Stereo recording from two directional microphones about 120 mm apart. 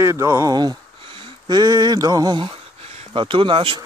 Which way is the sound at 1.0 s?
45° right (ahead or behind).